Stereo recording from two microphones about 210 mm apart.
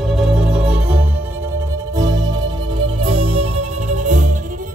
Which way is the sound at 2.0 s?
20° right (ahead or behind).